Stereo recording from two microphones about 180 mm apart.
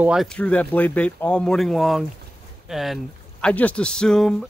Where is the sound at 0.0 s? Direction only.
Centre (ahead or behind).